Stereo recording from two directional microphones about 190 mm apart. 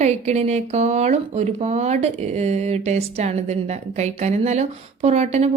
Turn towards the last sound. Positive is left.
turn(degrees=-35)  # may be behind; listen again after turning